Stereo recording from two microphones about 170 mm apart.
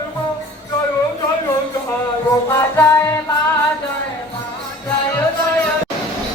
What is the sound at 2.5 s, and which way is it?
Music, 15° left (ahead or behind).